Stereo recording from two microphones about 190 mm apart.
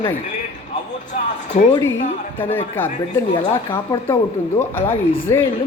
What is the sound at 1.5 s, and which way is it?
Speech, 40° left (ahead or behind).